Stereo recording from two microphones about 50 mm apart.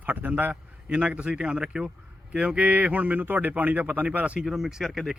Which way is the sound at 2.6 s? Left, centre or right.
Right.